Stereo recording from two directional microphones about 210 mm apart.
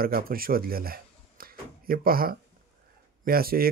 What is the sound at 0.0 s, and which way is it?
Speech, 45° right (ahead or behind).